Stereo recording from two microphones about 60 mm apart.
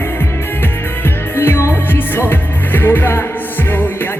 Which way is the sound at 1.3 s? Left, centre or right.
Left.